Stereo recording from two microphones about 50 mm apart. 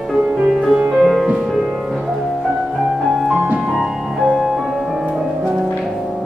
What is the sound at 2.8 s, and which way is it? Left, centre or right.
Music, centre.